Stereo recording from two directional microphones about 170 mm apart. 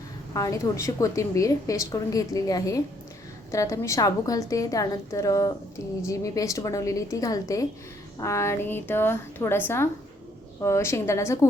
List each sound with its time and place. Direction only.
0.3 s a woman's voice: 20° left (ahead or behind)